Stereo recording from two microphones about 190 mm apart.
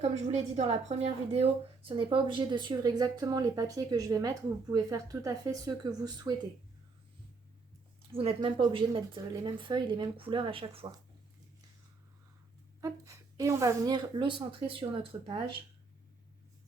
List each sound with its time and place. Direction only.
0.0 s a woman's voice: 35° right (ahead or behind)
8.1 s a woman's voice: 30° right (ahead or behind)
12.8 s a woman's voice: 15° right (ahead or behind)